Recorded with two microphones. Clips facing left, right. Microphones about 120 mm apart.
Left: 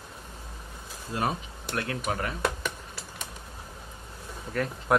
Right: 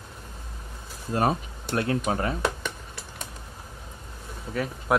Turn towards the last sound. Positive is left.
turn(degrees=-5)  # may be behind; listen again after turning